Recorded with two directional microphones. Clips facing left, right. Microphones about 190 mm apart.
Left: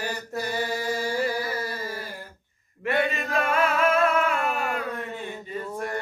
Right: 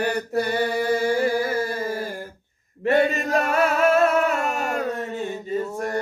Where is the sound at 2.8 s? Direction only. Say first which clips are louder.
Right 6 dB; 40° right (ahead or behind).